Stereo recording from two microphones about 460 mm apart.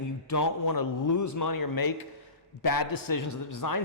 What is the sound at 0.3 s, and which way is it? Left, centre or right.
Speech, left.